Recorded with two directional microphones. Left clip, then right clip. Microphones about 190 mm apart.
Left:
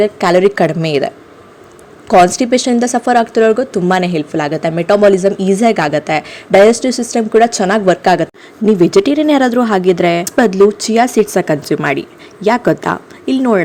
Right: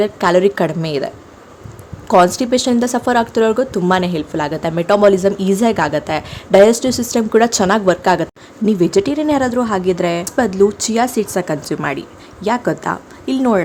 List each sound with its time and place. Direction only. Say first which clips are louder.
0.0 s a woman's voice: left 3 dB; 5° left (ahead or behind)
10.7 s a woman's voice: left 5 dB; 5° left (ahead or behind)
13.3 s a woman's voice: left 3 dB; 10° left (ahead or behind)